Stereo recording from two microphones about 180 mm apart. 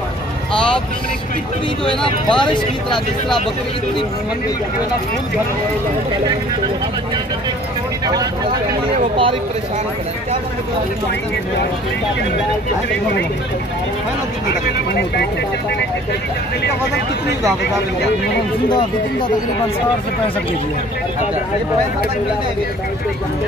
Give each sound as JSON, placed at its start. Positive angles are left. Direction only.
{"t": 0.5, "sound": "vehicle", "side_deg": 5}
{"t": 2.0, "sound": "speech", "side_deg": 25}
{"t": 8.9, "sound": "speech", "side_deg": -30}
{"t": 14.5, "sound": "speech", "side_deg": 70}